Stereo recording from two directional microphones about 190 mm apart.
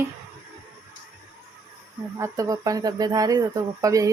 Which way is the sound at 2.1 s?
15° right (ahead or behind).